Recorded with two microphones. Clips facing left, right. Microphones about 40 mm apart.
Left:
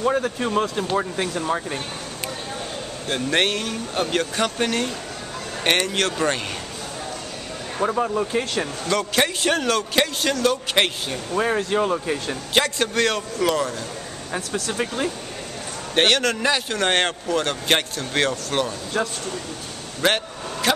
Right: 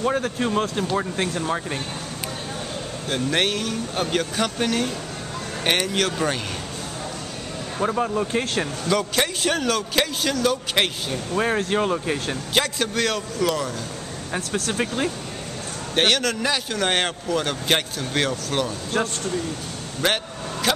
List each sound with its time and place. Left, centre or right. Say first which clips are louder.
0.4 s speech: even; centre
3.1 s speech: left 1 dB; centre
7.8 s speech: left 1 dB; centre
8.8 s speech: left 1 dB; centre
11.3 s speech: left 1 dB; centre
12.5 s speech: left 3 dB; centre
14.3 s speech: right 1 dB; centre
15.9 s speech: left 2 dB; centre
18.9 s speech: even; right
20.7 s vehicle: left 2 dB; centre